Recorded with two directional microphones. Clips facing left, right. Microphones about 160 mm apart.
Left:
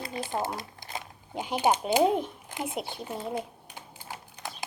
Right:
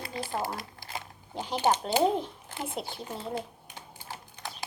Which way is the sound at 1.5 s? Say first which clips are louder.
Left 2 dB; 10° left (ahead or behind).